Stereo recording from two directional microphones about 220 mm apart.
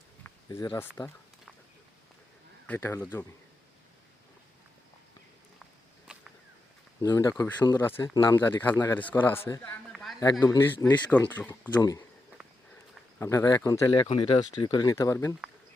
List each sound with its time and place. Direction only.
0.2 s a sound: 15° left (ahead or behind)
2.6 s speech: 10° left (ahead or behind)
6.1 s whip: 5° right (ahead or behind)
7.0 s speech: 15° left (ahead or behind)
9.9 s a sound: centre (ahead or behind)
10.4 s speech: 10° left (ahead or behind)
13.1 s speech: 15° left (ahead or behind)